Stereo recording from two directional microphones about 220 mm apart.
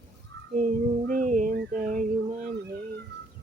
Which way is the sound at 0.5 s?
40° right (ahead or behind).